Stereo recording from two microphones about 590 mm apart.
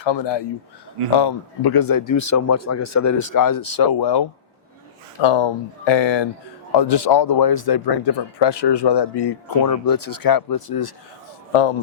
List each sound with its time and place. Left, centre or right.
0.0 s speech: left